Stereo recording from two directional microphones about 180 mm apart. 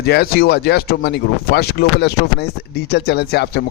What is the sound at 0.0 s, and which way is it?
Speech, 60° left (ahead or behind).